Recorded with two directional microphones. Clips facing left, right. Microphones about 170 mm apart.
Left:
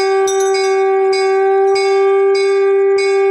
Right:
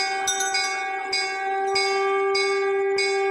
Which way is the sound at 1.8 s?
90° left.